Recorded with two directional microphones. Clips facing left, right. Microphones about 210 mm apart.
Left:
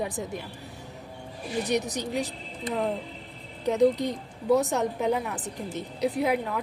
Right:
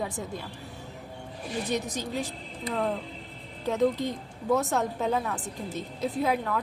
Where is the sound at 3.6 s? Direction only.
15° left (ahead or behind).